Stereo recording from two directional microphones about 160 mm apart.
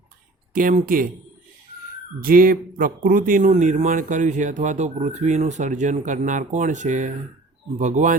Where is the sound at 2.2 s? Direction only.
65° right (ahead or behind).